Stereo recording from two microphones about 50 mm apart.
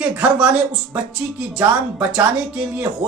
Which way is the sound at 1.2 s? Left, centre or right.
Right.